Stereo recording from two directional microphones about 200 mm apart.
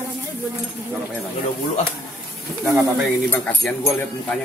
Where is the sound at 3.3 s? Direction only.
5° left (ahead or behind).